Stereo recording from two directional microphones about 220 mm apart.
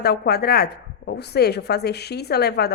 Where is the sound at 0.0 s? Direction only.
45° left (ahead or behind).